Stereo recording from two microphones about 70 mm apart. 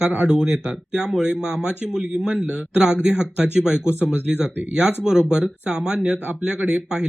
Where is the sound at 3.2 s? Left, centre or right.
Centre.